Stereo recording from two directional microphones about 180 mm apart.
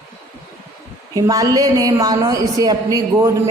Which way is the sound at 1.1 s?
20° right (ahead or behind).